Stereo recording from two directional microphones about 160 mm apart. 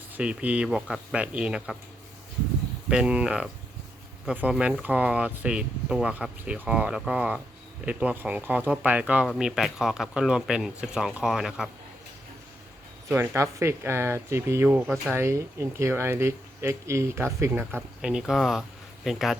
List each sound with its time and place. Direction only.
0.2 s speech: 5° right (ahead or behind)
2.9 s speech: 5° right (ahead or behind)
13.1 s speech: 15° right (ahead or behind)
18.0 s speech: 5° right (ahead or behind)